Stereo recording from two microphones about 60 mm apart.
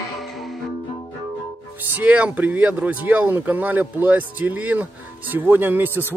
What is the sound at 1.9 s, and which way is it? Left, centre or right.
A man's voice, right.